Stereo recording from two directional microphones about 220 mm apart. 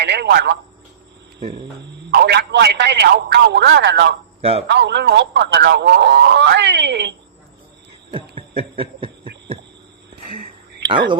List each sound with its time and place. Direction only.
0.0 s speech: 50° right (ahead or behind)
4.4 s a man's voice: 25° right (ahead or behind)
4.7 s speech: 50° right (ahead or behind)
8.1 s hum: 25° right (ahead or behind)